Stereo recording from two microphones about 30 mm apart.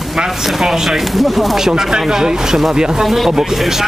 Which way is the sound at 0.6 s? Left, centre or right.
Centre.